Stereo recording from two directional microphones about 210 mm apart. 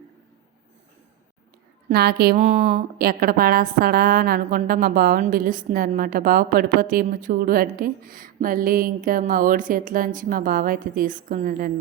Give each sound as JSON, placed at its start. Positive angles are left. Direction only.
{"t": 1.9, "sound": "a woman's voice", "side_deg": -50}
{"t": 2.4, "sound": "speech", "side_deg": -30}
{"t": 3.0, "sound": "a woman's voice", "side_deg": -45}